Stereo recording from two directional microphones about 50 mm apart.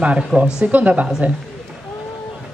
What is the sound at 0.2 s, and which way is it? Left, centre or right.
Speech, centre.